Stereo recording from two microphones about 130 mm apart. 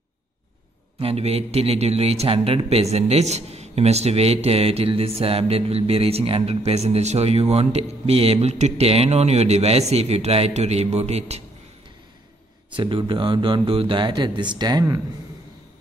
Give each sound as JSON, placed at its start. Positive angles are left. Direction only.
{"t": 0.9, "sound": "a man's voice", "side_deg": -50}
{"t": 12.7, "sound": "speech", "side_deg": -40}